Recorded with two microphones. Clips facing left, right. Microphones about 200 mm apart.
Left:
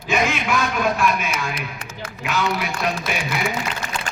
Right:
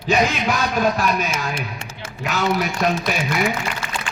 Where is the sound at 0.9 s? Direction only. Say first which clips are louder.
Even; 30° right (ahead or behind).